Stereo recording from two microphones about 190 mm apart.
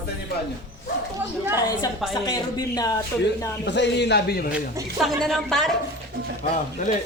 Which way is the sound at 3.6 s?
65° left (ahead or behind).